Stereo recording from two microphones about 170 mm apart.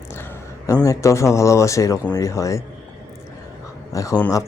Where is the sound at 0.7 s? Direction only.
20° left (ahead or behind).